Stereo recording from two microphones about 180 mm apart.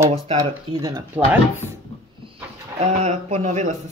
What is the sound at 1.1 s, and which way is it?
Speech, 10° right (ahead or behind).